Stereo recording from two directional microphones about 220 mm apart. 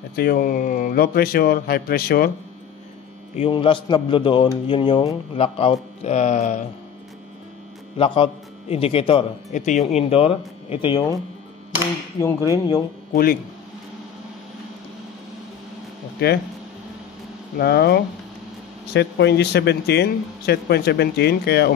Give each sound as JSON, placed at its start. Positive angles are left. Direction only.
{"t": 0.1, "sound": "speech", "side_deg": 45}
{"t": 3.3, "sound": "a man's voice", "side_deg": 25}
{"t": 8.0, "sound": "a man's voice", "side_deg": 25}
{"t": 12.4, "sound": "speech", "side_deg": 15}
{"t": 13.1, "sound": "speech", "side_deg": 40}
{"t": 16.2, "sound": "speech", "side_deg": 45}
{"t": 17.6, "sound": "speech", "side_deg": 45}